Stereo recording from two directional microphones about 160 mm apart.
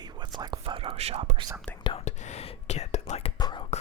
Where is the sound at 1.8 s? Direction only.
40° left (ahead or behind).